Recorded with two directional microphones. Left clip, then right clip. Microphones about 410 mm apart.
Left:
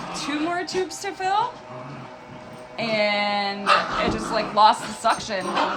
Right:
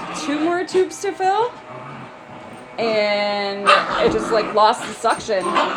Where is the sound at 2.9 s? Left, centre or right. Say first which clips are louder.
Right 3 dB; centre.